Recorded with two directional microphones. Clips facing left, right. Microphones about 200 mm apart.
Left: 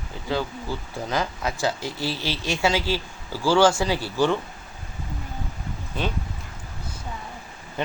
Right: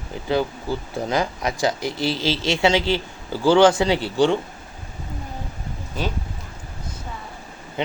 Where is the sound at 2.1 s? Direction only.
90° right.